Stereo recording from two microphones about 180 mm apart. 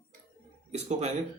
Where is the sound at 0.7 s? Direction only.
35° right (ahead or behind).